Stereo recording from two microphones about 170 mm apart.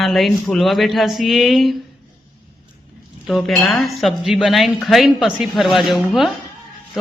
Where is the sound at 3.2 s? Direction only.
Centre (ahead or behind).